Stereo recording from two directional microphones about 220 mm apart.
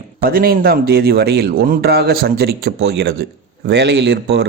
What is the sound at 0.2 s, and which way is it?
Speech, 40° right (ahead or behind).